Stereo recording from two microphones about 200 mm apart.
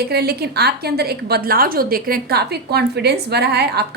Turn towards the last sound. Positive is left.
turn(degrees=-55)  # may be behind; listen again after turning